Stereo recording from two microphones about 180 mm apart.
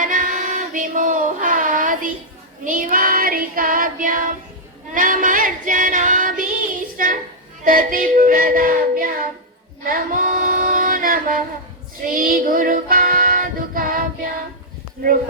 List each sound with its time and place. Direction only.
0.0 s child singing: 45° right (ahead or behind)
4.9 s female singing: 50° right (ahead or behind)
7.6 s child singing: 50° right (ahead or behind)
9.8 s female singing: 50° right (ahead or behind)
12.0 s child singing: 50° right (ahead or behind)